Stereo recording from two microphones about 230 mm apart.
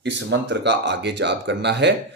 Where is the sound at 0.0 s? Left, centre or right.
Right.